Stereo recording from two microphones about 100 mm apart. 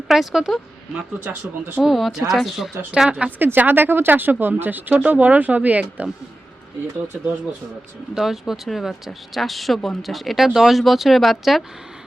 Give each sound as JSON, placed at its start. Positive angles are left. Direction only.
{"t": 0.1, "sound": "speech", "side_deg": -5}
{"t": 1.2, "sound": "speech", "side_deg": -20}
{"t": 1.8, "sound": "speech", "side_deg": 0}
{"t": 8.1, "sound": "speech", "side_deg": -5}